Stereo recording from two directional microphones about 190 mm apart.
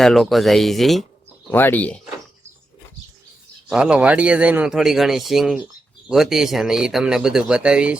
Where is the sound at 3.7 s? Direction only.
5° right (ahead or behind).